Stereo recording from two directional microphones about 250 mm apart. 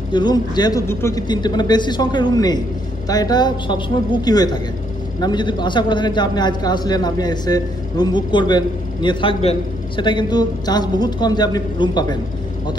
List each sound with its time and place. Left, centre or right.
0.1 s a man's voice: centre